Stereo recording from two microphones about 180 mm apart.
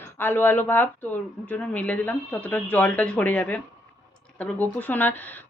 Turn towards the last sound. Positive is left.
turn(degrees=10)  # may be behind; listen again after turning